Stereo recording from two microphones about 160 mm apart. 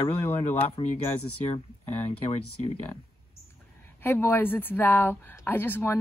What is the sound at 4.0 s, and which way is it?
Speech, 15° left (ahead or behind).